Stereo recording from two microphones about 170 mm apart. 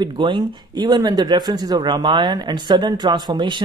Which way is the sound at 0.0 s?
25° right (ahead or behind).